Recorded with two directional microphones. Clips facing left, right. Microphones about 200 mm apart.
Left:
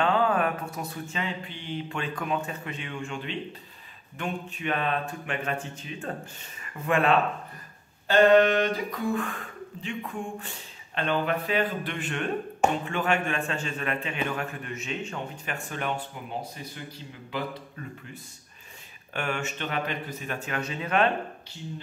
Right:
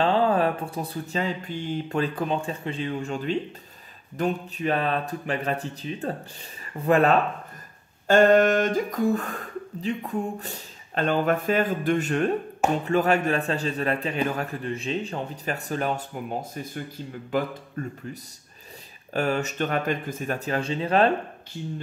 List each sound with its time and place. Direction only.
0.0 s a man's voice: 30° right (ahead or behind); by 17.9 s 50° right (ahead or behind)
19.1 s a man's voice: 40° right (ahead or behind)